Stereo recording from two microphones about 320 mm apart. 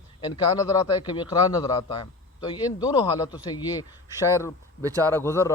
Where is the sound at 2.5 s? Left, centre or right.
Centre.